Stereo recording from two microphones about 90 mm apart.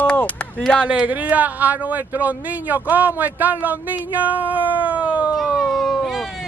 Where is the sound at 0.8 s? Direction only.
15° right (ahead or behind).